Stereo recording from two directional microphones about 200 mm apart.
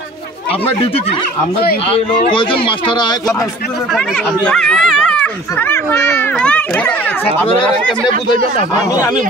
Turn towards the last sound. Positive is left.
turn(degrees=5)  # may be behind; listen again after turning